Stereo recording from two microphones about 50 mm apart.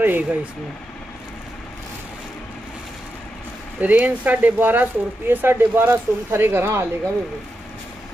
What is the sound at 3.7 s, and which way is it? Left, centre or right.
Speech, right.